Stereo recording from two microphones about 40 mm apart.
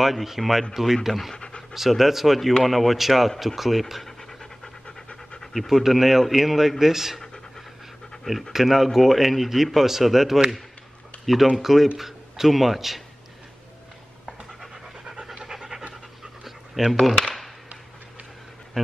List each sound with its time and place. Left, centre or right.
0.0 s speech: centre
1.3 s speech: left
1.7 s speech: centre
4.0 s pant: centre
5.4 s speech: centre
8.2 s speech: centre
15.3 s pant: centre
16.4 s dog: centre